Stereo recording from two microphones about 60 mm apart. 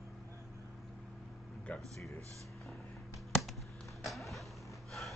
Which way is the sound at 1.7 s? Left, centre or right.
Left.